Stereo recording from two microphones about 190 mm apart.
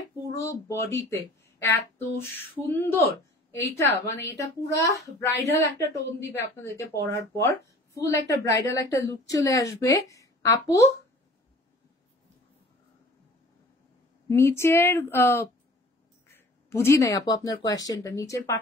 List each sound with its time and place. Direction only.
0.4 s a woman's voice: 15° left (ahead or behind)
14.3 s a woman's voice: 15° left (ahead or behind)